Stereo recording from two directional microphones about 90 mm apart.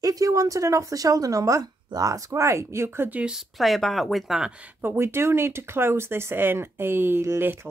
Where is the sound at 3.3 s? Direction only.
Centre (ahead or behind).